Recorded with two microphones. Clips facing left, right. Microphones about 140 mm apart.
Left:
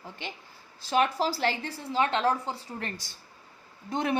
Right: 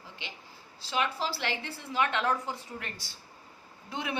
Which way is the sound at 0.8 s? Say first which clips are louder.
Left 6 dB; 45° left (ahead or behind).